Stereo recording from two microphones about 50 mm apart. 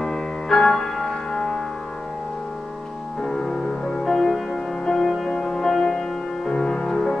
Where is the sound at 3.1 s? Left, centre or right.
Centre.